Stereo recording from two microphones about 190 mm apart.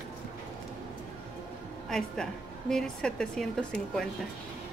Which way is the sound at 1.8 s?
5° left (ahead or behind).